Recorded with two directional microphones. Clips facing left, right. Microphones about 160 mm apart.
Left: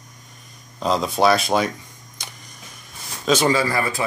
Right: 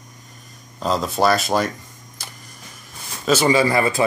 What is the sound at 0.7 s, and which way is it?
Speech, centre (ahead or behind).